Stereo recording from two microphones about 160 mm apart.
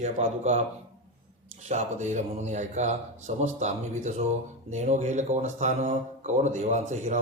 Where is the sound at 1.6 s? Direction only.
45° right (ahead or behind).